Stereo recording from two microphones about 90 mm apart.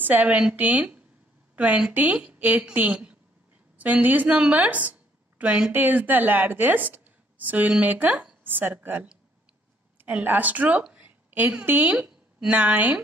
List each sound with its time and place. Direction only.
0.0 s a woman's voice: 20° right (ahead or behind)
1.5 s a sound: 15° right (ahead or behind)
2.0 s a woman's voice: 15° right (ahead or behind)